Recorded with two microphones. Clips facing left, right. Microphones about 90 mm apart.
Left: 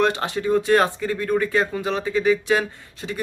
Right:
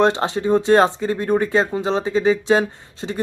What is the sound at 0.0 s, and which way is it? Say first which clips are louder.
Speech: right 4 dB; 25° right (ahead or behind).